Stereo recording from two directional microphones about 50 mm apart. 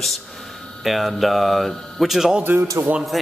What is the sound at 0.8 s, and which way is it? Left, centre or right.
Speech, centre.